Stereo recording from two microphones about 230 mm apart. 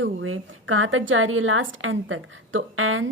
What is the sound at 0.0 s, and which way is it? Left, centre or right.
A woman's voice, right.